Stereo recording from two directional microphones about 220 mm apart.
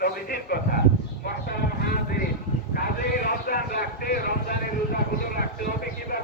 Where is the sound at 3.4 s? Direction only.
40° left (ahead or behind).